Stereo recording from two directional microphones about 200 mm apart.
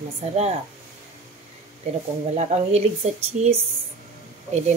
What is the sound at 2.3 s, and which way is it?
Speech, 35° right (ahead or behind).